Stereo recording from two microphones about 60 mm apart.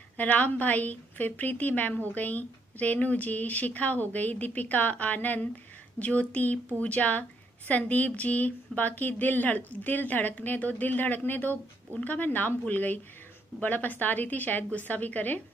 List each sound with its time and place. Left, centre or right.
0.2 s speech: left